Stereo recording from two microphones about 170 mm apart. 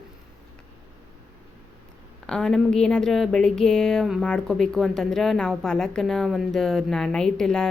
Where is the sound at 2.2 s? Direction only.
5° left (ahead or behind).